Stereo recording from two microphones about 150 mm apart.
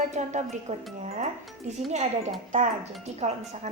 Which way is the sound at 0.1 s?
50° right (ahead or behind).